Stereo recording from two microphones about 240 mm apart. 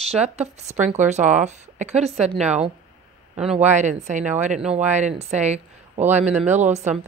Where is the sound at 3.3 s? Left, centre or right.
Centre.